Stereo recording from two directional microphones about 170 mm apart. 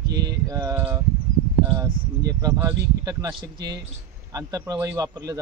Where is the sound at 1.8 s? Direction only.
20° right (ahead or behind).